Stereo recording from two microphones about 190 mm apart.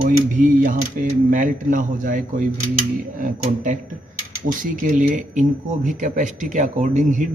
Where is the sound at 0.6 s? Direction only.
45° right (ahead or behind).